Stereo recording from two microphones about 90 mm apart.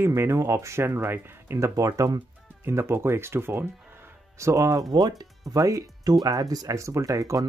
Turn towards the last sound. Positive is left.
turn(degrees=-40)  # may be behind; listen again after turning